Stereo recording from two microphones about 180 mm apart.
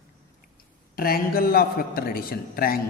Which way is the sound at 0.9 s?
55° left (ahead or behind).